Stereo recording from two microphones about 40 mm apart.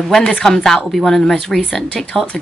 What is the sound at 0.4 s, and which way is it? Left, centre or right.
Speech, centre.